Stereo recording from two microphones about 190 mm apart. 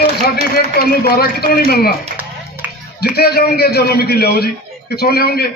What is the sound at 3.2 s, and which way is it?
A man's voice, 55° left (ahead or behind).